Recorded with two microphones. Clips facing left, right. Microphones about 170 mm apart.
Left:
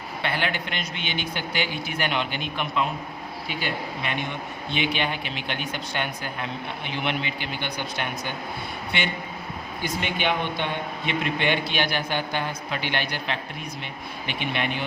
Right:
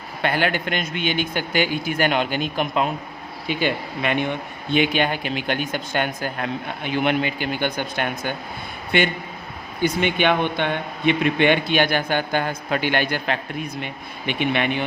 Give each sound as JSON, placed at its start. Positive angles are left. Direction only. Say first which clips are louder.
{"t": 0.2, "sound": "a man's voice", "louder": "right 6 dB", "side_deg": -50}
{"t": 4.0, "sound": "a man's voice", "louder": "right 11 dB", "side_deg": -60}
{"t": 9.8, "sound": "a man's voice", "louder": "right 7 dB", "side_deg": -65}